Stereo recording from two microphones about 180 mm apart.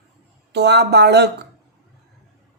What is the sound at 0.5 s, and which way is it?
Speech, 70° right (ahead or behind).